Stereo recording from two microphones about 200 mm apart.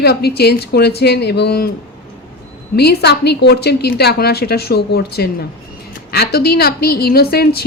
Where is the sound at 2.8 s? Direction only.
55° left (ahead or behind).